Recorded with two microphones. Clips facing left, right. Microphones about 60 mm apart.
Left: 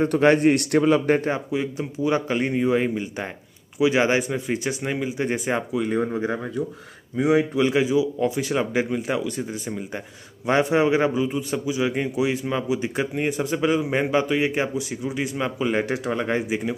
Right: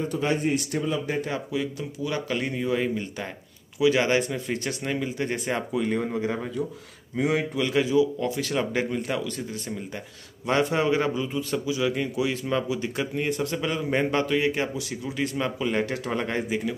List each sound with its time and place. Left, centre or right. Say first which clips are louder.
0.0 s speech: left 8 dB; left
1.0 s speech: left 8 dB; left
1.3 s a man's voice: left 3 dB; left
5.9 s a man's voice: left 3 dB; left